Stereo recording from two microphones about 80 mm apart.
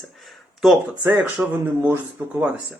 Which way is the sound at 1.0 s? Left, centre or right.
Right.